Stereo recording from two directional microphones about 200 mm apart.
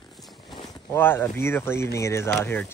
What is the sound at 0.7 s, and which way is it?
Speech, 10° left (ahead or behind).